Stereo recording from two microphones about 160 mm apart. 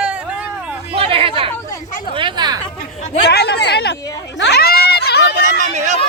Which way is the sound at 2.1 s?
30° right (ahead or behind).